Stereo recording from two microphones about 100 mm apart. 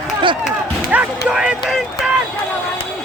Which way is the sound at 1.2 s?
5° right (ahead or behind).